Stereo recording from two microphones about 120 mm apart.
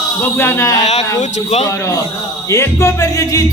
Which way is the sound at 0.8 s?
65° left (ahead or behind).